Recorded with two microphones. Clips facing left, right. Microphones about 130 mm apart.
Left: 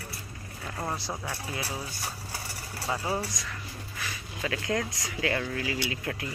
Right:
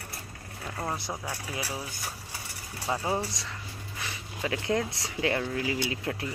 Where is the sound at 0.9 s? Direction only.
20° right (ahead or behind).